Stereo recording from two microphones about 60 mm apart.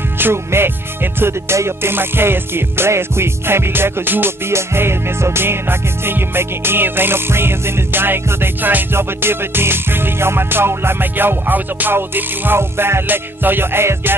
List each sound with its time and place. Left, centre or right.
0.2 s music: right
4.5 s music: right